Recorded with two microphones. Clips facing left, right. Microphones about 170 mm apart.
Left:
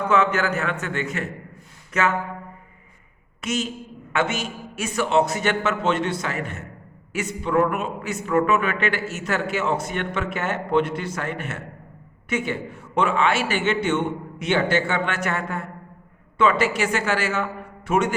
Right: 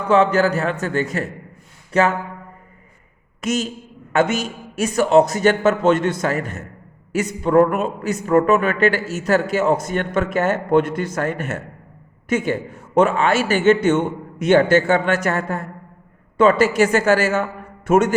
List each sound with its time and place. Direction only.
0.1 s a man's voice: 35° right (ahead or behind)
1.9 s a sound: 35° right (ahead or behind)
3.4 s a man's voice: 40° right (ahead or behind)